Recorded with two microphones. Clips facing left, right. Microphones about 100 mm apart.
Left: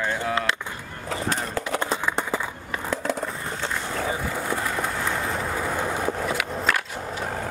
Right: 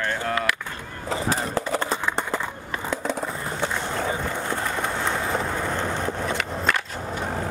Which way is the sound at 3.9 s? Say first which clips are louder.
Right 1 dB; centre (ahead or behind).